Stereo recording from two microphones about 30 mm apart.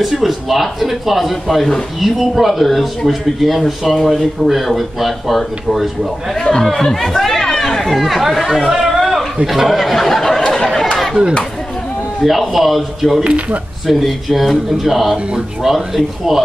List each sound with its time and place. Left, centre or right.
0.0 s speech: centre
6.3 s speech: left
6.8 s chatter: centre
8.0 s speech: centre
8.6 s chatter: centre
9.5 s speech: centre
10.5 s chatter: centre
12.2 s speech: centre